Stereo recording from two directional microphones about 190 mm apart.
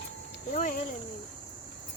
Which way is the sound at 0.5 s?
45° left (ahead or behind).